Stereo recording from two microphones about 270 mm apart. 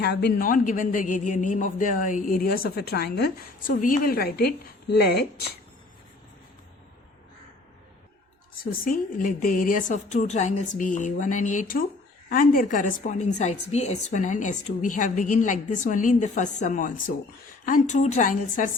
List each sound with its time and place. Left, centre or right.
0.0 s speech: left
9.1 s a woman's voice: left